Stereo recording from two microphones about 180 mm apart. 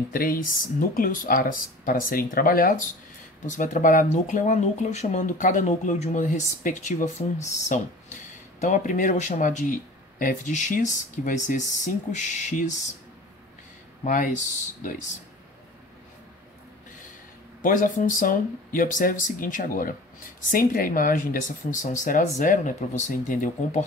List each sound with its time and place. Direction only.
0.1 s speech: 55° left (ahead or behind)
14.0 s speech: 50° left (ahead or behind)
17.6 s speech: 45° left (ahead or behind)